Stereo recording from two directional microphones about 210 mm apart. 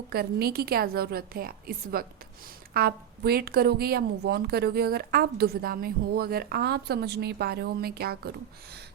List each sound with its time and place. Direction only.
0.1 s a woman's voice: 45° right (ahead or behind)